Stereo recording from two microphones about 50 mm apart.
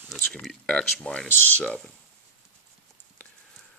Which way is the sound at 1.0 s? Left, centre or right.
Left.